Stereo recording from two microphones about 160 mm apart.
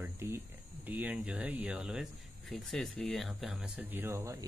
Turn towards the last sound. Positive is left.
turn(degrees=-20)  # may be behind; listen again after turning